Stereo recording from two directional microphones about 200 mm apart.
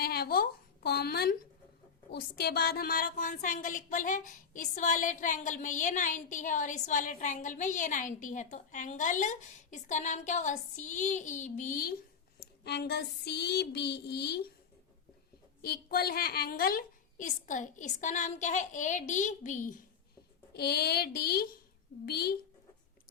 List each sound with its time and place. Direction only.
0.0 s speech: 50° left (ahead or behind)
12.6 s a sound: 55° left (ahead or behind)
15.6 s speech: 50° left (ahead or behind)
20.5 s a child's voice: 50° left (ahead or behind)